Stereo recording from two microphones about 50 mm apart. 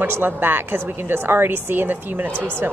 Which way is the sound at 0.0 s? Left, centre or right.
Right.